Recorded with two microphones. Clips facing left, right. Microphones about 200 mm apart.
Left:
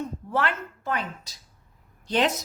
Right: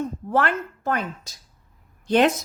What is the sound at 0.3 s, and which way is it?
A woman's voice, 50° right (ahead or behind).